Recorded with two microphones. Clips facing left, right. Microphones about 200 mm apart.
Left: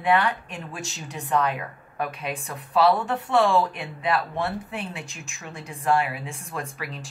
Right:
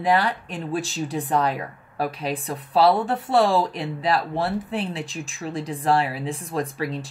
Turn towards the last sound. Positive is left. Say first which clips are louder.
# right 8 dB
turn(degrees=-35)  # may be behind; listen again after turning